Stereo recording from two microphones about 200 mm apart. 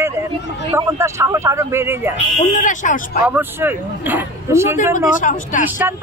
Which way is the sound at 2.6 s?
40° left (ahead or behind).